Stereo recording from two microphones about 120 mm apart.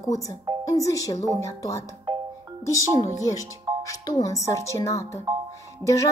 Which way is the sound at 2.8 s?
25° right (ahead or behind).